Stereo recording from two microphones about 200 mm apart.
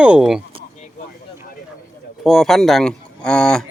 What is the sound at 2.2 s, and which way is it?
Speech, centre (ahead or behind).